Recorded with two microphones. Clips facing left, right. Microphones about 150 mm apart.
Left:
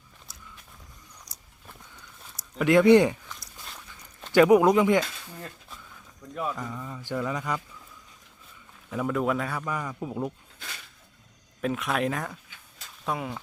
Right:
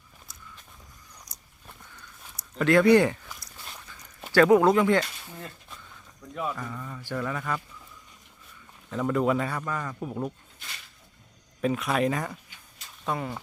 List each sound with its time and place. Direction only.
1.3 s biting: 45° right (ahead or behind)
2.6 s speech: 20° left (ahead or behind)
3.2 s a sound: 5° right (ahead or behind)
4.3 s mantra: 15° left (ahead or behind)
6.6 s mantra: 15° left (ahead or behind)
8.9 s a man's voice: 5° left (ahead or behind)
9.6 s mantra: 10° left (ahead or behind)
11.6 s a man's voice: centre (ahead or behind)